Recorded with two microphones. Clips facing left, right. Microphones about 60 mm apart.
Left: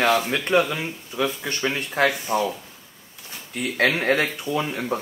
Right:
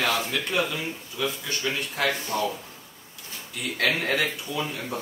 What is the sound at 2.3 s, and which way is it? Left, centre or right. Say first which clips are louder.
Speech: left 5 dB; left.